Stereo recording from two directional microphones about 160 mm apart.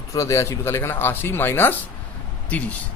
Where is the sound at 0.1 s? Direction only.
20° left (ahead or behind).